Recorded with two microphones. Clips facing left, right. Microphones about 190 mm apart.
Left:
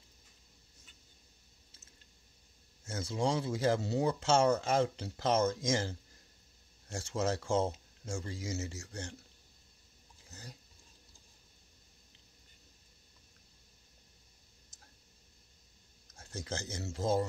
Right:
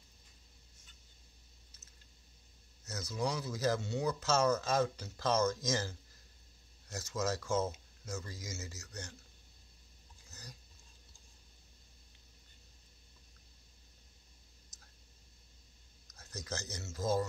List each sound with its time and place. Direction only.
2.8 s speech: 30° left (ahead or behind)
10.3 s a sound: 25° left (ahead or behind)
16.1 s speech: 30° left (ahead or behind)